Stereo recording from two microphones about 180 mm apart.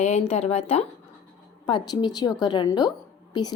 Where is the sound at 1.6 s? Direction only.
25° left (ahead or behind).